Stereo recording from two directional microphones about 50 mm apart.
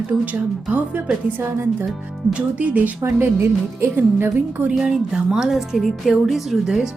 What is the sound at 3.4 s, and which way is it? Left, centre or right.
Speech, right.